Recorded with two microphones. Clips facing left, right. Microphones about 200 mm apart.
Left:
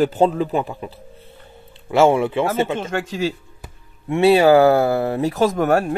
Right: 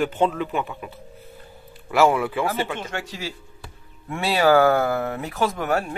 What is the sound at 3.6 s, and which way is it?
Speech, 25° left (ahead or behind).